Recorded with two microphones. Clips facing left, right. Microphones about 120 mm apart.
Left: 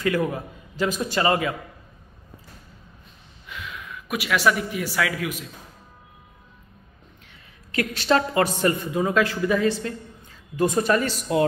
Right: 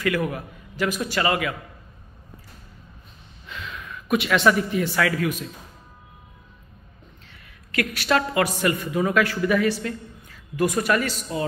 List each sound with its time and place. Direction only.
0.0 s a man's voice: 25° left (ahead or behind)
3.4 s gasp: 10° left (ahead or behind)
4.9 s a man's voice: 10° left (ahead or behind)
7.7 s a man's voice: 25° left (ahead or behind)